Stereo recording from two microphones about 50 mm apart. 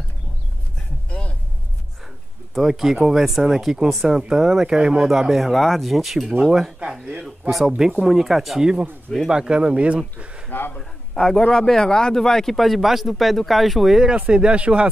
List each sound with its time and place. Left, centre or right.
2.5 s a man's voice: centre
9.3 s speech: centre
10.5 s a sound: left
10.8 s a man's voice: centre
14.1 s speech: right